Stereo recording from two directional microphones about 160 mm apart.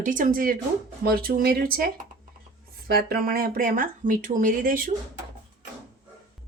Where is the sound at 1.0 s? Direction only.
70° right (ahead or behind).